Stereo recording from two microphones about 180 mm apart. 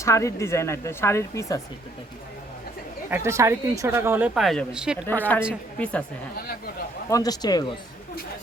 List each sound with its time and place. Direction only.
0.0 s speech: 15° left (ahead or behind)
3.1 s speech: 15° right (ahead or behind)
4.4 s speech: centre (ahead or behind)
5.0 s speech: 10° left (ahead or behind)
6.3 s speech: 55° left (ahead or behind)
7.1 s speech: 20° left (ahead or behind)